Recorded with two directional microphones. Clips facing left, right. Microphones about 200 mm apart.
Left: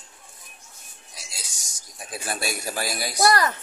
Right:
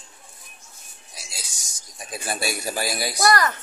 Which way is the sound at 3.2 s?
30° left (ahead or behind).